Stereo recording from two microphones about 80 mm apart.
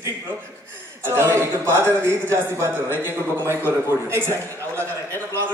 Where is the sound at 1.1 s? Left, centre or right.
Right.